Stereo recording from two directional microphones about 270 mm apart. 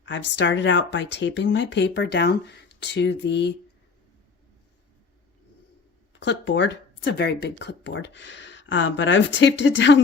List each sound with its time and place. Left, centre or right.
0.0 s speech: left
6.1 s speech: left